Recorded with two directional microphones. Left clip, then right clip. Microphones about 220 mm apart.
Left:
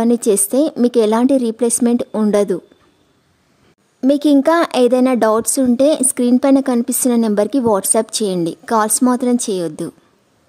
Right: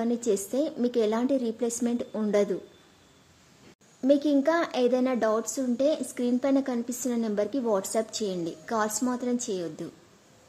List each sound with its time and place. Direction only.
0.0 s speech: 50° left (ahead or behind)
4.0 s speech: 50° left (ahead or behind)